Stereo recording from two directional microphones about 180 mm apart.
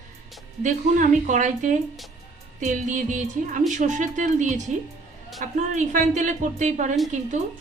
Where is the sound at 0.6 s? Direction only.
45° right (ahead or behind).